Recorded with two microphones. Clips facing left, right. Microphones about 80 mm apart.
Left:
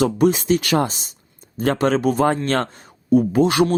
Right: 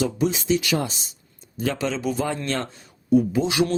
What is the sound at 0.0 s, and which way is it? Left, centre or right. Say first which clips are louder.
Speech: left 6 dB; left.